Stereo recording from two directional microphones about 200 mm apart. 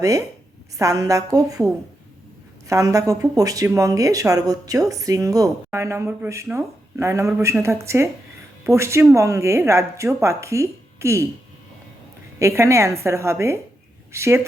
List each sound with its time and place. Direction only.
0.0 s speech: 15° right (ahead or behind)
12.4 s speech: 15° right (ahead or behind)